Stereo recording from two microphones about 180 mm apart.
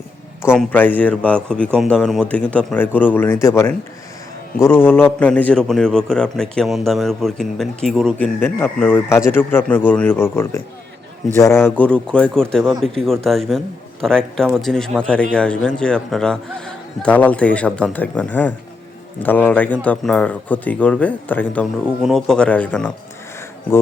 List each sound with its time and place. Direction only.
0.7 s a man's voice: 10° left (ahead or behind)